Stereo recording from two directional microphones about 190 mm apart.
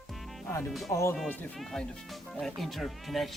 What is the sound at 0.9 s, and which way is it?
Speech, 15° left (ahead or behind).